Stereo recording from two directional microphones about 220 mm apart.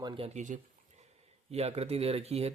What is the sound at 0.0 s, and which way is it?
Speech, 25° right (ahead or behind).